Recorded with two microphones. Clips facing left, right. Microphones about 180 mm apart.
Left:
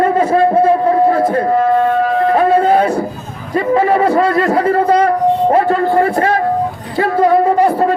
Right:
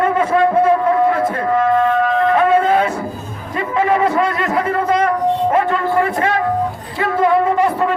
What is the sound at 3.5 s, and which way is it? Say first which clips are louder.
A man's voice: left 4 dB; 35° left (ahead or behind).